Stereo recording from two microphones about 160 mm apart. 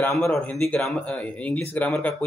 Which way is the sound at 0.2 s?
5° left (ahead or behind).